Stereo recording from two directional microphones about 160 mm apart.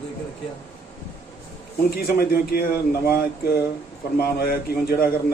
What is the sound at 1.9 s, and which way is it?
A man's voice, 70° left (ahead or behind).